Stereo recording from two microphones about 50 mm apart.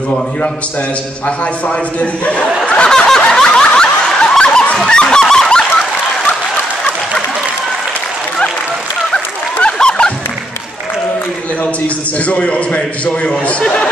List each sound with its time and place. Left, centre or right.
2.0 s a man's voice: left
2.6 s snicker: centre
5.2 s goose: centre
5.5 s a sound: centre
9.1 s a sound: centre
12.3 s a man's voice: left